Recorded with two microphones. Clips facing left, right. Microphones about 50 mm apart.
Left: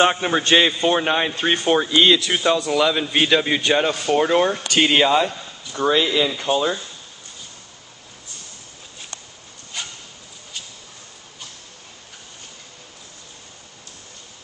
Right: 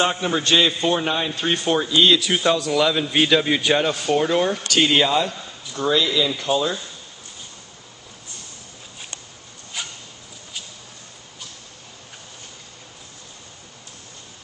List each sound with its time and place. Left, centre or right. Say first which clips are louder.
0.0 s a man's voice: left 3 dB; left
2.2 s a man's voice: even; centre
4.1 s speech: left 2 dB; centre
9.8 s a sound: even; centre